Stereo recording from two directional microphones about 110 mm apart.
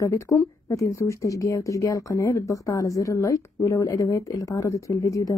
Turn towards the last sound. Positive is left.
turn(degrees=30)  # may be behind; listen again after turning